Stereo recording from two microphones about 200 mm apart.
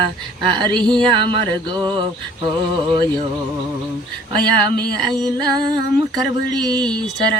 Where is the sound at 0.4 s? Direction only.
20° right (ahead or behind).